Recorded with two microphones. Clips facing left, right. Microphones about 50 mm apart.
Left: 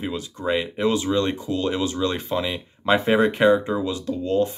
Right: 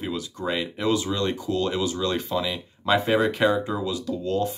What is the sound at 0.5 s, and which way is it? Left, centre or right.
Speech, left.